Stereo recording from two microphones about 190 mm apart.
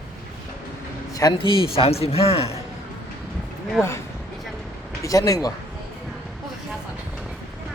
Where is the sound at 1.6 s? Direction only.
30° left (ahead or behind).